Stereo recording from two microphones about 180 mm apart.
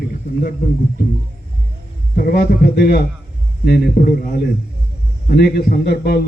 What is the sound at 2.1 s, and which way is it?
A man's voice, 55° left (ahead or behind).